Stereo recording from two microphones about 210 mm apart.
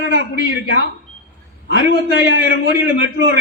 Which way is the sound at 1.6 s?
50° left (ahead or behind).